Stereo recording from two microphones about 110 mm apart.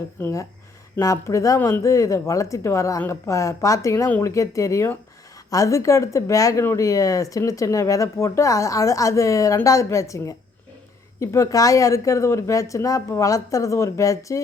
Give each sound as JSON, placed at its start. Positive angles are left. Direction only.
{"t": 0.2, "sound": "speech", "side_deg": 25}